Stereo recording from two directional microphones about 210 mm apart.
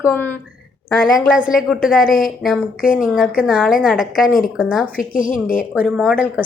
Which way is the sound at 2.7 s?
40° left (ahead or behind).